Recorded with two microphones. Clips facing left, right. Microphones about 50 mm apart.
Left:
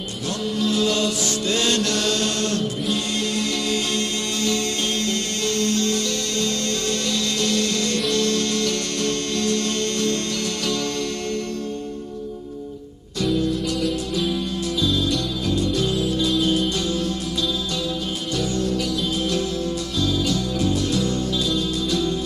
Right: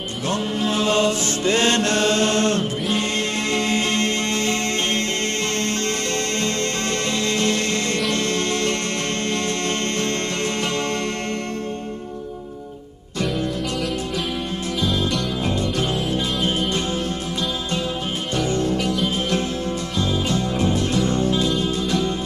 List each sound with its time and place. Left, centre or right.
0.3 s mantra: right
5.6 s music: right
15.0 s music: right
18.3 s music: right
20.0 s music: right